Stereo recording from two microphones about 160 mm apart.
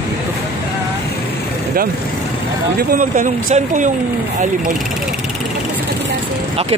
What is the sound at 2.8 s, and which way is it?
Speech, 65° right (ahead or behind).